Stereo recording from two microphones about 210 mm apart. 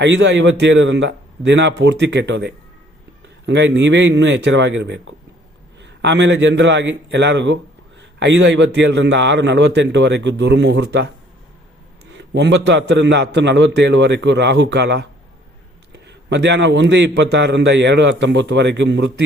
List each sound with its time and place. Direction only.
0.0 s a man's voice: 60° right (ahead or behind)
12.1 s a man's voice: 60° right (ahead or behind)